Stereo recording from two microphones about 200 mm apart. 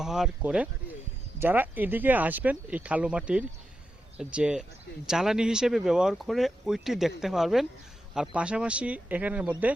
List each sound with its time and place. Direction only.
0.0 s speech: 5° right (ahead or behind)